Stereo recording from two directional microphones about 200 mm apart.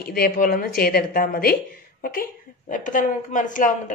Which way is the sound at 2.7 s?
40° left (ahead or behind).